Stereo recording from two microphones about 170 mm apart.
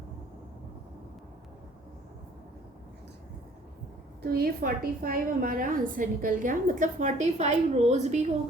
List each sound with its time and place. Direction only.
4.2 s a woman's voice: 65° right (ahead or behind); by 8.3 s 45° right (ahead or behind)